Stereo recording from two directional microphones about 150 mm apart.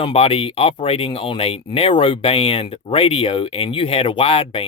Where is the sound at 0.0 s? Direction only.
40° left (ahead or behind).